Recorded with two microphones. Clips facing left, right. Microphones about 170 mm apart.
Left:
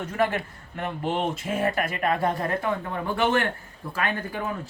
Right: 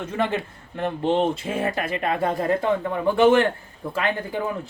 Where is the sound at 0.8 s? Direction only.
30° right (ahead or behind).